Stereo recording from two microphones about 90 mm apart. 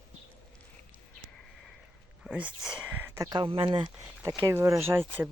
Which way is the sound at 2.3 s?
10° right (ahead or behind).